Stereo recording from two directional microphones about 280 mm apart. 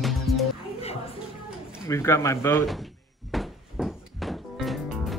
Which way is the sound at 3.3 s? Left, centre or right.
Centre.